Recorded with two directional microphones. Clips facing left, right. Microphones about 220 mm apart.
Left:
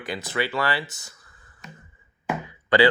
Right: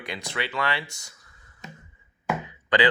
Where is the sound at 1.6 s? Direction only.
25° right (ahead or behind).